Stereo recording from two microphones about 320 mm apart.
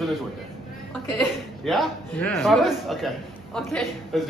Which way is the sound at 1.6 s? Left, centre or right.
Centre.